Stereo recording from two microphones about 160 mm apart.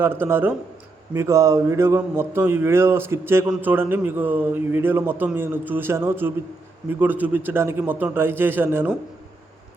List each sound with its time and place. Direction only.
0.0 s a man's voice: 15° right (ahead or behind)